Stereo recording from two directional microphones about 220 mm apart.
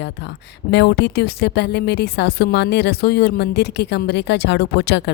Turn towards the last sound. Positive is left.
turn(degrees=50)  # may be behind; listen again after turning